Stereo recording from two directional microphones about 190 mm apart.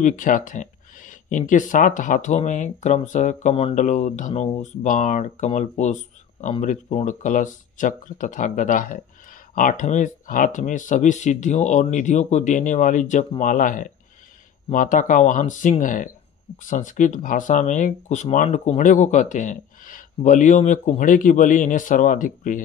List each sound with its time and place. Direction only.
0.0 s speech: 45° left (ahead or behind)